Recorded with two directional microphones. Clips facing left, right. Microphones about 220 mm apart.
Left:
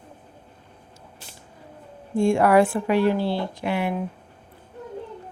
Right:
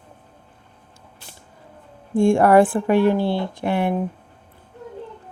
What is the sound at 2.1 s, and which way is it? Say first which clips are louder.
Speech: right 3 dB; 50° right (ahead or behind).